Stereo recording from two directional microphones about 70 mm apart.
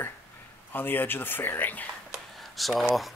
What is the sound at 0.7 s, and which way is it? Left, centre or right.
Speech, left.